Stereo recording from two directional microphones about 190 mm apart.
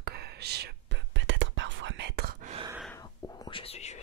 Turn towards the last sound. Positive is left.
turn(degrees=35)  # may be behind; listen again after turning